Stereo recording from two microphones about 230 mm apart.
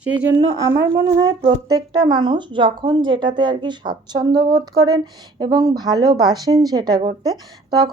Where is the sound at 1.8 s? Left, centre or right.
Centre.